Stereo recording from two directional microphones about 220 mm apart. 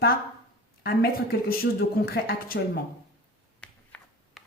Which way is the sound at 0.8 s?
45° left (ahead or behind).